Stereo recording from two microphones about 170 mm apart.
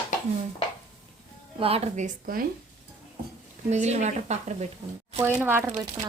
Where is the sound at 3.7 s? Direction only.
40° right (ahead or behind).